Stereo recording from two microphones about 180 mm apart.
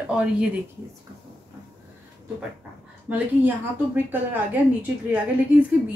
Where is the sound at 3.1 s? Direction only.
10° right (ahead or behind).